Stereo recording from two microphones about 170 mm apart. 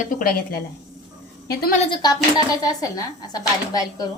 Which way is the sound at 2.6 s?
20° left (ahead or behind).